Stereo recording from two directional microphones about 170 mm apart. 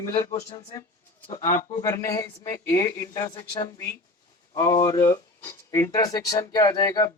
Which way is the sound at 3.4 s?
35° left (ahead or behind).